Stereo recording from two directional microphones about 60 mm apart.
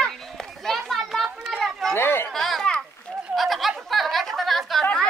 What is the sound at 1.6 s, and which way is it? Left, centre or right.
Run, centre.